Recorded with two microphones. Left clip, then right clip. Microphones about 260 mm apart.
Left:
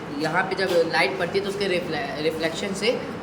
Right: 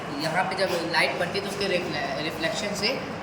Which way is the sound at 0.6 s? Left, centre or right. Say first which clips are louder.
Left 5 dB; centre.